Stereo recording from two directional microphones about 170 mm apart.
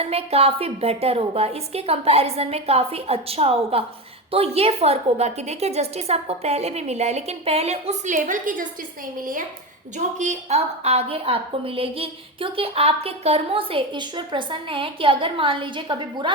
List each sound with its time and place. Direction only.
0.0 s a woman's voice: 35° right (ahead or behind)
10.0 s a woman's voice: 45° right (ahead or behind); by 16.3 s 25° right (ahead or behind)